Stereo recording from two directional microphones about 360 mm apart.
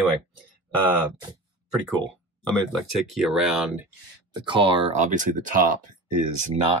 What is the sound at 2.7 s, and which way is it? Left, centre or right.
Speech, centre.